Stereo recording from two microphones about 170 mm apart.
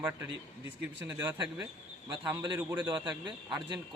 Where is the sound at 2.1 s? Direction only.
25° right (ahead or behind).